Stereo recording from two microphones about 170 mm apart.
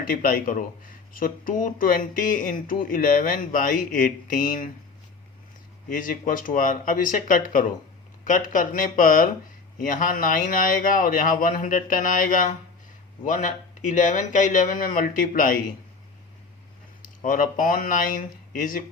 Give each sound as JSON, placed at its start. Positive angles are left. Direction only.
{"t": 0.0, "sound": "speech", "side_deg": 55}
{"t": 5.9, "sound": "speech", "side_deg": 55}
{"t": 17.0, "sound": "speech", "side_deg": 55}